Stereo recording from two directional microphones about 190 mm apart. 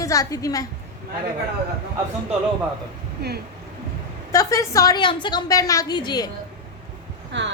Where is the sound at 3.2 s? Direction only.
60° right (ahead or behind).